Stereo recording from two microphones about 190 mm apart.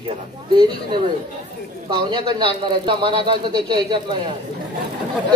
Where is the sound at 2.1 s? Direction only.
25° right (ahead or behind).